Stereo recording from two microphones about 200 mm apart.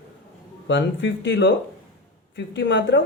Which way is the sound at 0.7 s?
65° left (ahead or behind).